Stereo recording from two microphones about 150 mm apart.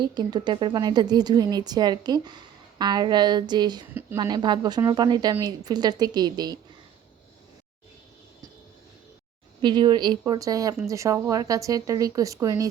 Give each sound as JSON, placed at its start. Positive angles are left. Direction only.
{"t": 0.0, "sound": "a woman's voice", "side_deg": -30}
{"t": 9.6, "sound": "a woman's voice", "side_deg": -30}